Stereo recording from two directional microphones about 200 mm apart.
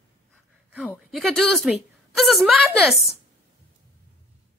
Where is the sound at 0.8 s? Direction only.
Centre (ahead or behind).